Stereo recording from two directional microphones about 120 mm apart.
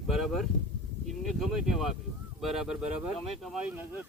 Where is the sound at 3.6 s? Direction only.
15° right (ahead or behind).